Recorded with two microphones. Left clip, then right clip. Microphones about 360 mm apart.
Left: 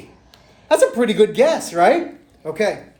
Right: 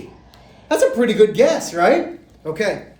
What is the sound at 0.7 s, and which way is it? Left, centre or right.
A woman's voice, left.